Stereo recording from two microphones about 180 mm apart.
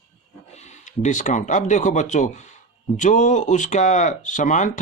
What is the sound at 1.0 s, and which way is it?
Speech, 45° left (ahead or behind).